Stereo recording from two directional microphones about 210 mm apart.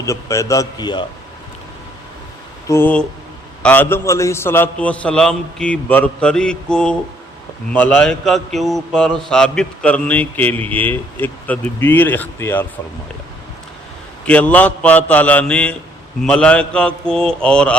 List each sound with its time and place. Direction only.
0.0 s speech: 15° left (ahead or behind)
2.6 s a man's voice: 10° left (ahead or behind)
14.3 s a man's voice: 5° left (ahead or behind)